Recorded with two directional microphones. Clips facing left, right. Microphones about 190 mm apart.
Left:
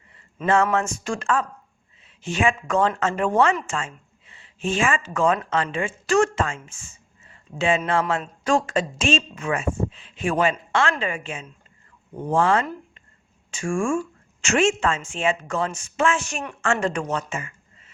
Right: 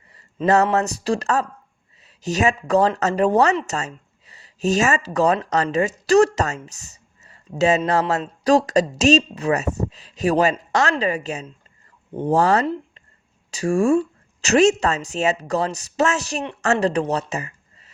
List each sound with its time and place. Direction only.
0.1 s speech: 40° right (ahead or behind)